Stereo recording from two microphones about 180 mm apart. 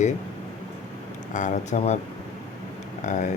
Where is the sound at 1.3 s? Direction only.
45° left (ahead or behind).